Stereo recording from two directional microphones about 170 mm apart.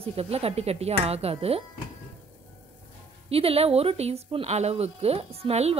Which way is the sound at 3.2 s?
35° right (ahead or behind).